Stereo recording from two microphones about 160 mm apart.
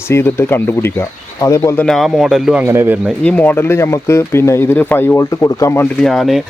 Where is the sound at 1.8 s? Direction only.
Centre (ahead or behind).